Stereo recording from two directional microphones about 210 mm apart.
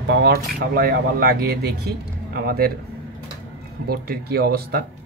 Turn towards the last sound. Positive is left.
turn(degrees=-50)  # may be behind; listen again after turning